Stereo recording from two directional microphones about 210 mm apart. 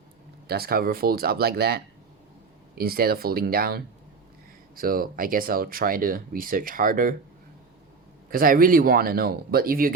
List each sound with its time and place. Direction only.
0.4 s speech: 50° right (ahead or behind)
8.3 s speech: 45° right (ahead or behind)